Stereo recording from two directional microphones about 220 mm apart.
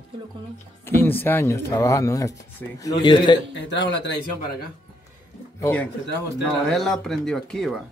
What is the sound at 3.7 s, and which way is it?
Speech, 55° left (ahead or behind).